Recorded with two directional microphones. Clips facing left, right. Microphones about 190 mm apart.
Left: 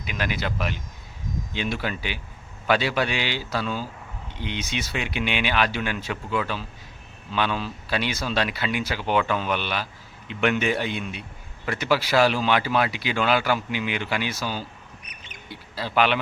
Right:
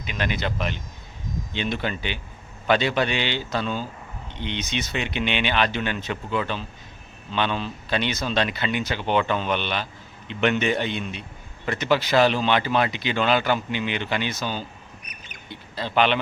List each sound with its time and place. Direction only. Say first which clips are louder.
0.0 s speech: right 1 dB; 5° left (ahead or behind)
15.0 s duck: right 1 dB; 25° left (ahead or behind)
15.4 s speech: right 1 dB; 5° left (ahead or behind)